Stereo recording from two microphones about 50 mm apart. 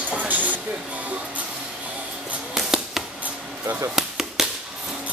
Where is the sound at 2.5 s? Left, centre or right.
Centre.